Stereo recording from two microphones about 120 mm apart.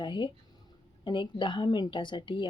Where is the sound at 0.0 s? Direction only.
40° left (ahead or behind).